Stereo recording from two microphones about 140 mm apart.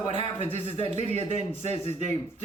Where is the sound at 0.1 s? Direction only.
40° left (ahead or behind).